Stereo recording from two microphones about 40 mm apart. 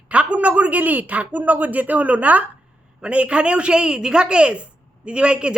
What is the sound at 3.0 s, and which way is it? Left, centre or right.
A woman's voice, right.